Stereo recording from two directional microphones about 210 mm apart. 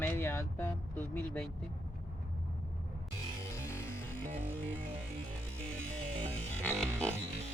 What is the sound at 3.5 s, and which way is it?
Music, 15° left (ahead or behind).